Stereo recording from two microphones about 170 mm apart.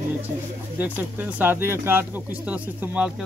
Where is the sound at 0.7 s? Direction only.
10° right (ahead or behind).